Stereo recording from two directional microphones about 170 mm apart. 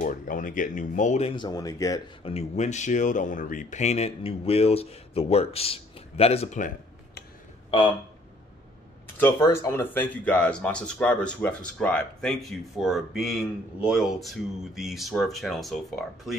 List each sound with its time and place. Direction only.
0.0 s speech: 50° left (ahead or behind)
1.3 s speech: 25° left (ahead or behind)
2.2 s speech: 40° left (ahead or behind)
9.0 s speech: 15° left (ahead or behind)